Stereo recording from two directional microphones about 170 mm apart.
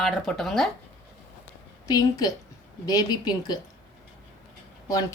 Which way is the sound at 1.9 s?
20° left (ahead or behind).